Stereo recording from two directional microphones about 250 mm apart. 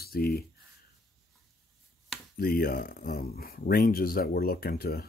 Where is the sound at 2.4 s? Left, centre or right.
Left.